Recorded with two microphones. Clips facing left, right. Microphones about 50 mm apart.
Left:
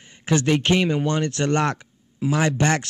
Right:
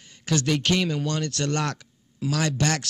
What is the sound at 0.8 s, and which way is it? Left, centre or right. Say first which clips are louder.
Speech: left 5 dB; centre.